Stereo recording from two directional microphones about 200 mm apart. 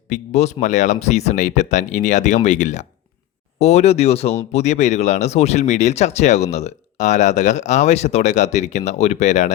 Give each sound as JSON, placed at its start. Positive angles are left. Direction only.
{"t": 0.1, "sound": "speech", "side_deg": 35}